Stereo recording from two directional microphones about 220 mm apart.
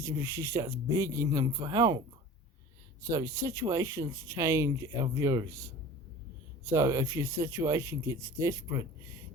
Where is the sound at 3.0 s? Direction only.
15° right (ahead or behind).